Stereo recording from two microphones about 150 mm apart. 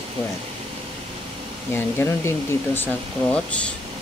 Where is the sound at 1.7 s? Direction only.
15° left (ahead or behind).